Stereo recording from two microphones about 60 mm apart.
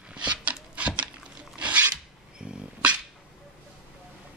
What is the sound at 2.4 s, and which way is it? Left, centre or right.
Dog, centre.